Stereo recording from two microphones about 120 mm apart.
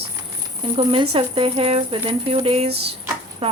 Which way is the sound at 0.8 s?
45° right (ahead or behind).